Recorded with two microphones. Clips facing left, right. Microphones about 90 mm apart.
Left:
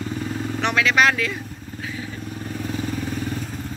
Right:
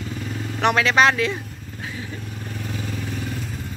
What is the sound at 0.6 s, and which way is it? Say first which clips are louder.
Speech: right 2 dB; 35° right (ahead or behind).